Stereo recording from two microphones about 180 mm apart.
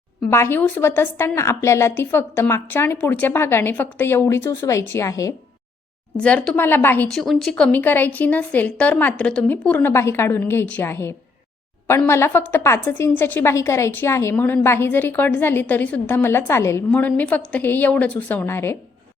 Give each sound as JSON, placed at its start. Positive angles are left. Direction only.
{"t": 0.2, "sound": "a woman's voice", "side_deg": 15}
{"t": 6.1, "sound": "a woman's voice", "side_deg": 5}